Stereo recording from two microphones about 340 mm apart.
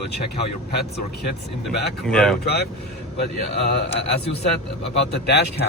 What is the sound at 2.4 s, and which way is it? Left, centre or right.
Speech, left.